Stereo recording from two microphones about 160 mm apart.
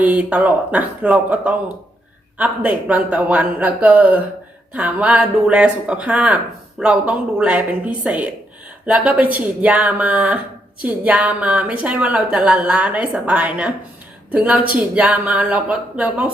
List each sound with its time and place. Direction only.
0.0 s speech: 10° right (ahead or behind)